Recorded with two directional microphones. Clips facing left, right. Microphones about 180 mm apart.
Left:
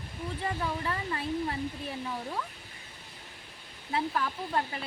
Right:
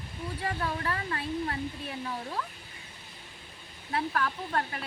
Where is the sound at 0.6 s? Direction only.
5° left (ahead or behind).